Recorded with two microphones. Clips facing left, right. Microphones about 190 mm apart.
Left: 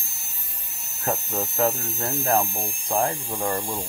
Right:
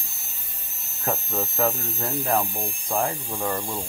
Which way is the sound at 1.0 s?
10° left (ahead or behind).